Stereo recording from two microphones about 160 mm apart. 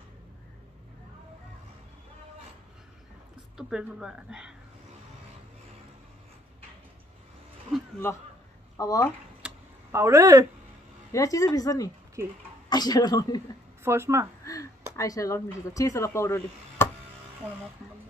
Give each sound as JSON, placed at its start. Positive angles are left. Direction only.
{"t": 3.5, "sound": "speech", "side_deg": -5}
{"t": 8.7, "sound": "speech", "side_deg": 20}
{"t": 9.4, "sound": "computer keyboard", "side_deg": -15}
{"t": 11.1, "sound": "speech", "side_deg": 20}
{"t": 13.8, "sound": "a woman's voice", "side_deg": -15}
{"t": 14.4, "sound": "a sound", "side_deg": 20}
{"t": 15.0, "sound": "speech", "side_deg": 20}